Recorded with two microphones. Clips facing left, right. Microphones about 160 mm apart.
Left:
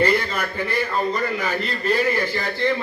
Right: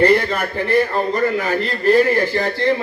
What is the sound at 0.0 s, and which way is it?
A man's voice, 60° right (ahead or behind).